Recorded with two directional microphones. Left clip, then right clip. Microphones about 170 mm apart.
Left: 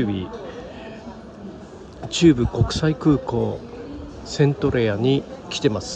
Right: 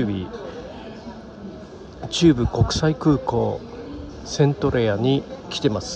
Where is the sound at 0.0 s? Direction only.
30° right (ahead or behind).